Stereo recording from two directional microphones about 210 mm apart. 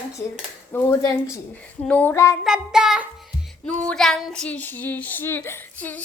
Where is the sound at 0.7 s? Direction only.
10° left (ahead or behind).